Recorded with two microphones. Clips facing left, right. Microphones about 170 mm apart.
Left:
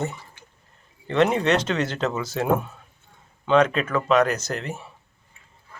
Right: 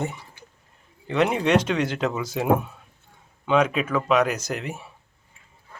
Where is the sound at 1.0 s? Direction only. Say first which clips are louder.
Left 2 dB; 10° right (ahead or behind).